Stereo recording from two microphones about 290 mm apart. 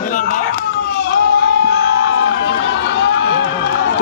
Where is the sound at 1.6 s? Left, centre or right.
Left.